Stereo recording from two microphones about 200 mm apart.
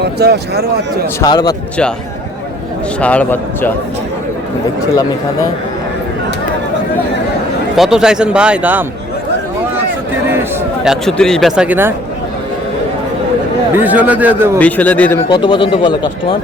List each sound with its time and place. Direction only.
0.0 s speech: 55° right (ahead or behind)
1.2 s speech: 20° left (ahead or behind)
3.0 s a man's voice: 5° left (ahead or behind)
7.8 s speech: 5° right (ahead or behind)
10.8 s speech: centre (ahead or behind)
13.7 s speech: 10° right (ahead or behind)
14.6 s a man's voice: 5° left (ahead or behind)
15.3 s speech: 25° left (ahead or behind)